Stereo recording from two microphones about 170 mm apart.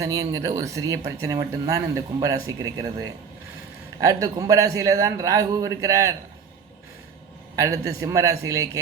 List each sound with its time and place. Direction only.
0.0 s a man's voice: 20° right (ahead or behind)
7.5 s a man's voice: 20° right (ahead or behind)